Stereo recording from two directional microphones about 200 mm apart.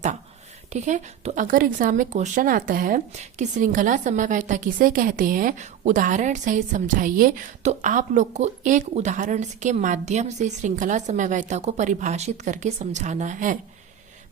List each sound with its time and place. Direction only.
0.7 s a woman's voice: 35° right (ahead or behind)